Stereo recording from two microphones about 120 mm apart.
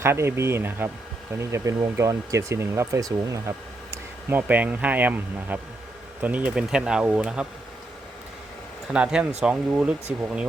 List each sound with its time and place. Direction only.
0.0 s speech: 20° right (ahead or behind)
3.9 s speech: 15° right (ahead or behind)
8.9 s speech: 5° right (ahead or behind)